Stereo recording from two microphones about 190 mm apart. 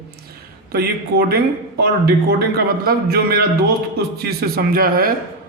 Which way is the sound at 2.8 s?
55° right (ahead or behind).